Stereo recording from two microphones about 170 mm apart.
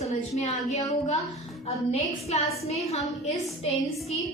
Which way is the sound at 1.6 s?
35° left (ahead or behind).